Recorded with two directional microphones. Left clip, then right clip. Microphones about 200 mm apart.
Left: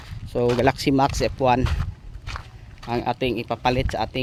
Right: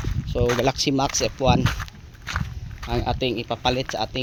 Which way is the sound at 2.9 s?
5° left (ahead or behind).